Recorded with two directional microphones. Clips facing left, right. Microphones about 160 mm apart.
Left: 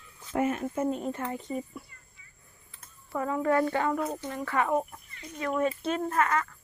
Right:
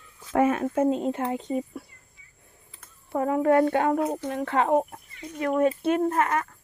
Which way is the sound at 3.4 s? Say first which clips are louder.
Right 5 dB; 55° right (ahead or behind).